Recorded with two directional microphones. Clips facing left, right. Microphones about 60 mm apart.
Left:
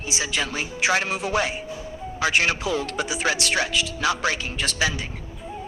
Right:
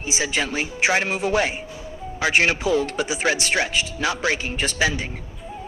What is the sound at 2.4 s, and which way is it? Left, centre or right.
Speech, right.